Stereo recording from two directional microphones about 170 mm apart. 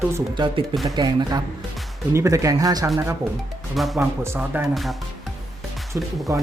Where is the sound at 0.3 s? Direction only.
30° right (ahead or behind).